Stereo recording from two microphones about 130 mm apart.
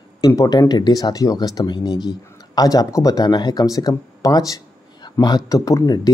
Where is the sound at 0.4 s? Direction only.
30° left (ahead or behind).